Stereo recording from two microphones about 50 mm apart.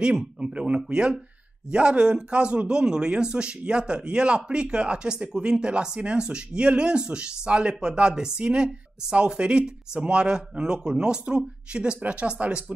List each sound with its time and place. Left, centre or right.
0.0 s speech: centre